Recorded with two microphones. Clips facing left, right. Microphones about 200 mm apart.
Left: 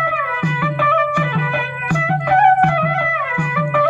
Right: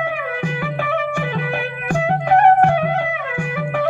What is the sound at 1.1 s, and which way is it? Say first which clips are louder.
Music: left 2 dB; 45° right (ahead or behind).